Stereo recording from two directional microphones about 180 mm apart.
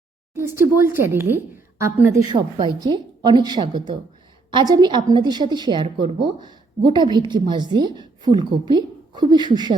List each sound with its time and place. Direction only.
0.3 s a woman's voice: 15° right (ahead or behind)
2.3 s a woman's voice: 25° right (ahead or behind)